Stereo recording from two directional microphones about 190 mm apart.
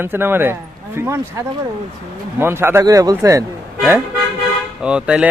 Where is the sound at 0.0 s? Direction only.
10° right (ahead or behind).